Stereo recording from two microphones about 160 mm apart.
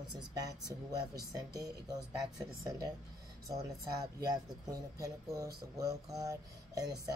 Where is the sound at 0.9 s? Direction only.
25° right (ahead or behind).